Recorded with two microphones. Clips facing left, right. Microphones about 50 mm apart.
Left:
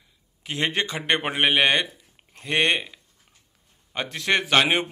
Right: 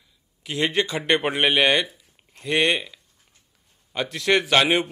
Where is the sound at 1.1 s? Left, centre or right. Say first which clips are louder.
Even; centre.